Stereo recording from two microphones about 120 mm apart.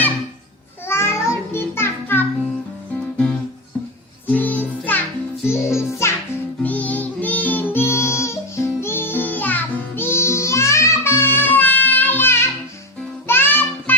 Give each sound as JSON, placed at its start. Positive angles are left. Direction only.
{"t": 0.9, "sound": "music", "side_deg": 20}
{"t": 4.3, "sound": "music", "side_deg": 15}